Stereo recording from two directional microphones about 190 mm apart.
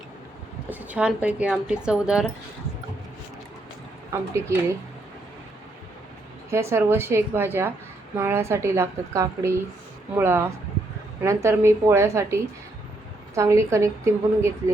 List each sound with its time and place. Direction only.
0.7 s speech: 10° right (ahead or behind)
4.5 s a woman's voice: 15° right (ahead or behind)
6.5 s a woman's voice: 15° right (ahead or behind)